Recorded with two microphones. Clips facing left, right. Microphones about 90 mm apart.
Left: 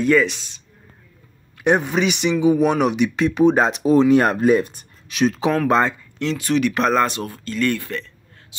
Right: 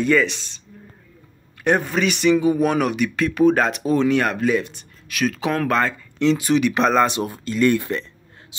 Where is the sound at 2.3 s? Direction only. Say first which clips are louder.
Left 2 dB; centre (ahead or behind).